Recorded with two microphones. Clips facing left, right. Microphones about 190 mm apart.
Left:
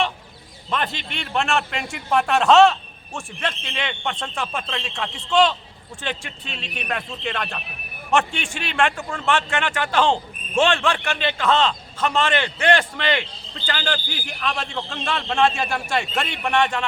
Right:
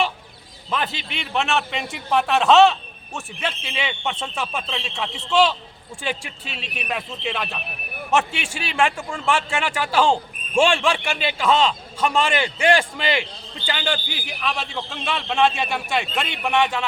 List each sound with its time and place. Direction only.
0.7 s a man's voice: 5° right (ahead or behind)